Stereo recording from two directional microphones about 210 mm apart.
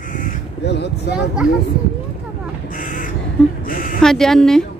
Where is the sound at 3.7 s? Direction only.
40° left (ahead or behind).